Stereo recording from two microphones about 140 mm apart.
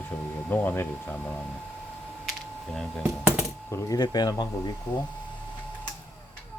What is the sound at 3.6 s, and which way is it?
Speech, 20° left (ahead or behind).